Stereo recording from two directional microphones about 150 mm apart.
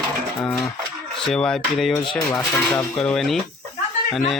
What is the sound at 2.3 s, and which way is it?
Speech, 20° left (ahead or behind).